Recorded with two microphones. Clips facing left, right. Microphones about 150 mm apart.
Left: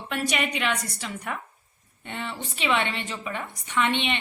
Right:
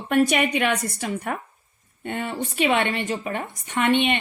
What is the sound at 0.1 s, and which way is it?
Speech, 50° right (ahead or behind).